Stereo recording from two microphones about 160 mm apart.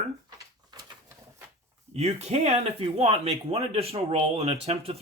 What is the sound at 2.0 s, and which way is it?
Speech, 40° right (ahead or behind).